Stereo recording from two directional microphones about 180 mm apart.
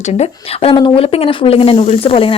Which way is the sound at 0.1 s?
35° left (ahead or behind).